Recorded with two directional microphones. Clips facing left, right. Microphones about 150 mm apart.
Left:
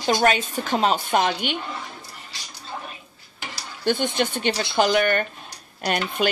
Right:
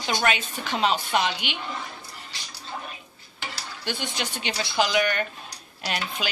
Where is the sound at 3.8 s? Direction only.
50° left (ahead or behind).